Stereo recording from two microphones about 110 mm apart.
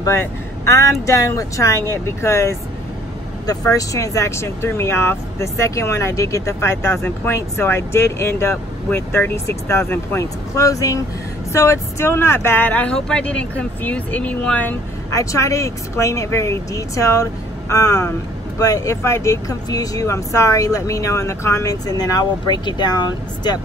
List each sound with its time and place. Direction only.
0.0 s speech: 25° left (ahead or behind)
3.7 s speech: 30° left (ahead or behind); by 14.8 s 15° left (ahead or behind)
15.0 s speech: 30° left (ahead or behind)